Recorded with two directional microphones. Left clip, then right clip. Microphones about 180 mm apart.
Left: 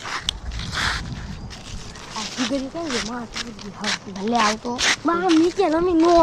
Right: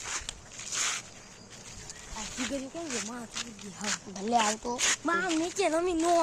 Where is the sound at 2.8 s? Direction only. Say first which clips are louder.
Left 10 dB; 35° left (ahead or behind).